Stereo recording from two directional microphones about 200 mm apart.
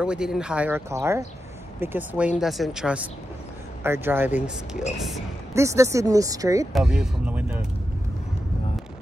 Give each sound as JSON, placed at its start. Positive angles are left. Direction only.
{"t": 0.0, "sound": "speech", "side_deg": -5}
{"t": 6.7, "sound": "speech", "side_deg": -5}